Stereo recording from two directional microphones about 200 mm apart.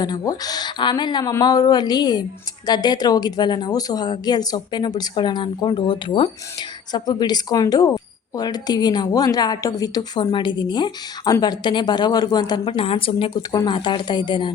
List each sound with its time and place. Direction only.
0.0 s a woman's voice: 20° left (ahead or behind)